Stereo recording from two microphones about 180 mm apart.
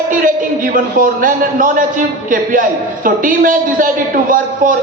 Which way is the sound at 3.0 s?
50° right (ahead or behind).